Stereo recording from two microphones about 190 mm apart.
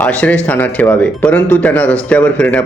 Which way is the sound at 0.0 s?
5° left (ahead or behind).